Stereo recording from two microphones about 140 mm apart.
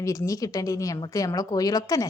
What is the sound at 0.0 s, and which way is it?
Speech, 20° left (ahead or behind).